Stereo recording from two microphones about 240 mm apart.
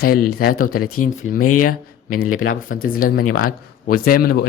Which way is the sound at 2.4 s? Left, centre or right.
Left.